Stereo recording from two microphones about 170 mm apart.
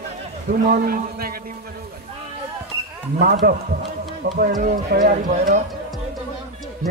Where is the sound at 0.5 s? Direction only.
55° right (ahead or behind).